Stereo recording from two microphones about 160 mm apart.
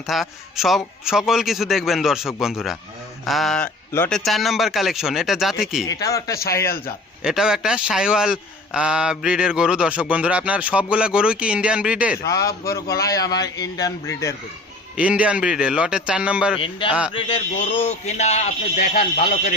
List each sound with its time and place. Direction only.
0.1 s a man's voice: centre (ahead or behind)
4.2 s a man's voice: centre (ahead or behind)
5.8 s a man's voice: 20° left (ahead or behind)
7.2 s a man's voice: 5° right (ahead or behind)
12.2 s a man's voice: 20° left (ahead or behind)
14.9 s speech: 5° right (ahead or behind)
16.6 s a man's voice: 35° left (ahead or behind)
17.7 s a man's voice: 45° left (ahead or behind)